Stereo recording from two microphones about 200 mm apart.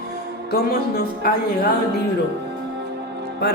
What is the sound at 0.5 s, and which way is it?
Speech, 50° left (ahead or behind).